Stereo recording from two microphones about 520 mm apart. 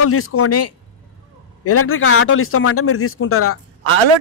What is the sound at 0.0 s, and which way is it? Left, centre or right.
Speech, left.